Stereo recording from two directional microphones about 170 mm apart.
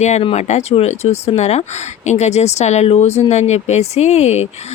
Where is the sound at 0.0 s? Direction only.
40° left (ahead or behind).